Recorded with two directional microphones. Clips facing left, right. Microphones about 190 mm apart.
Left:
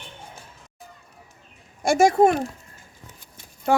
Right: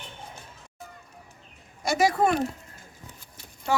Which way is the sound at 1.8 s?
50° left (ahead or behind).